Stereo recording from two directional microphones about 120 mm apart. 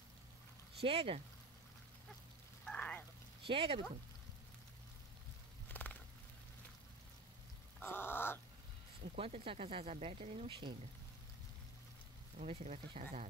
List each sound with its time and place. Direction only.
0.7 s speech: 55° right (ahead or behind)
2.6 s a sound: 10° left (ahead or behind)
3.4 s speech: 50° right (ahead or behind)
5.7 s a sound: 15° left (ahead or behind)
7.8 s crow: 20° left (ahead or behind)
9.0 s speech: 60° right (ahead or behind)
12.4 s speech: 55° right (ahead or behind)